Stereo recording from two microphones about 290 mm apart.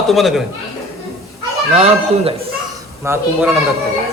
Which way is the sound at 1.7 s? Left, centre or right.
Right.